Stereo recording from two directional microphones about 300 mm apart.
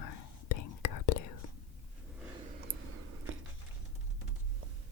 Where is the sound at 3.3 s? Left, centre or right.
Right.